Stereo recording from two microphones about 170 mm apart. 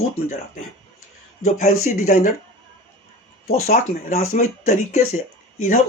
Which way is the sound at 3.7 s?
45° left (ahead or behind).